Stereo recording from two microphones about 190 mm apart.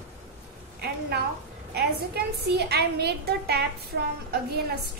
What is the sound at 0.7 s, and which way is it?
A woman's voice, 55° right (ahead or behind).